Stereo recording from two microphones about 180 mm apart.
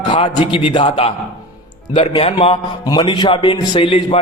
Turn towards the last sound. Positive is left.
turn(degrees=30)  # may be behind; listen again after turning